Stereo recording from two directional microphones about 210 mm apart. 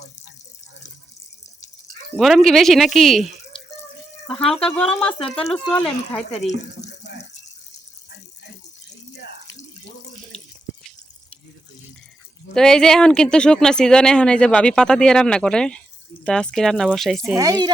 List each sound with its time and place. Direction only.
2.1 s speech: centre (ahead or behind)
4.3 s speech: centre (ahead or behind)
6.5 s water tap: 55° left (ahead or behind)
12.5 s speech: 5° left (ahead or behind)
17.3 s speech: 15° right (ahead or behind)